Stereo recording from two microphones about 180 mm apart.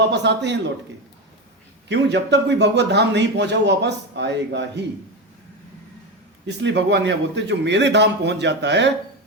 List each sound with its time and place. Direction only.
0.0 s a man's voice: 70° right (ahead or behind)
1.9 s a man's voice: 70° right (ahead or behind)
6.5 s a man's voice: 80° right